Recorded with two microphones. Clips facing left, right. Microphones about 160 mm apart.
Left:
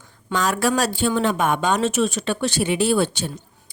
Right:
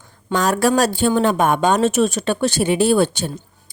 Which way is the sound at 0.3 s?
40° right (ahead or behind).